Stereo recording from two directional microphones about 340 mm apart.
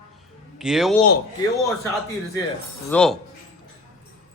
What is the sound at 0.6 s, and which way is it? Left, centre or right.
Speech, centre.